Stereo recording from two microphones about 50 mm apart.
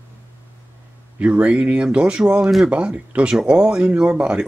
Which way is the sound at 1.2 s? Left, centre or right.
Right.